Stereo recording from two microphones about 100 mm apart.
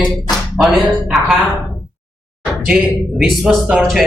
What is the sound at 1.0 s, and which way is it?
Speech, 5° right (ahead or behind).